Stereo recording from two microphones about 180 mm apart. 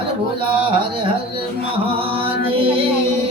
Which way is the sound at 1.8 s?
30° right (ahead or behind).